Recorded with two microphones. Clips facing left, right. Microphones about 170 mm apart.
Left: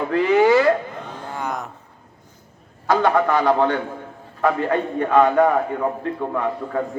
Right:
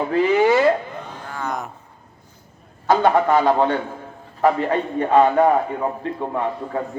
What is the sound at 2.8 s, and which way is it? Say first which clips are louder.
A man's voice: right 1 dB; 25° right (ahead or behind).